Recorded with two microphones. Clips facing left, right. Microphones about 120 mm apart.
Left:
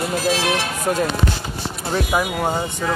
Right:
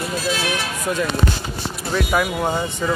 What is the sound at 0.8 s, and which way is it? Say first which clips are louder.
Music: left 2 dB; 40° left (ahead or behind).